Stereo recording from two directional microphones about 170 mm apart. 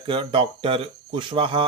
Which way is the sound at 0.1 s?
30° right (ahead or behind).